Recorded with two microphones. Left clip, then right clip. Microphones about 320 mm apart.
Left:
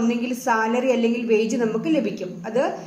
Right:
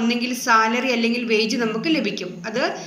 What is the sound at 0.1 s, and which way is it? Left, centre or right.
A woman's voice, left.